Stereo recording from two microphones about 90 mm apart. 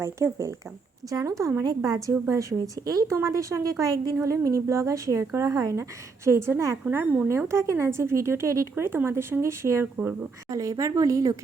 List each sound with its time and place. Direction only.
0.0 s a woman's voice: 35° right (ahead or behind)
6.2 s a woman's voice: 30° right (ahead or behind)
6.9 s speech: 15° right (ahead or behind)
7.3 s a woman's voice: 30° right (ahead or behind)
10.0 s speech: 15° right (ahead or behind)
10.5 s a woman's voice: 35° right (ahead or behind)